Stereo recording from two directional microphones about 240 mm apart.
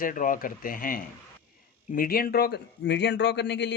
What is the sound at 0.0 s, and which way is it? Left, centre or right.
Speech, left.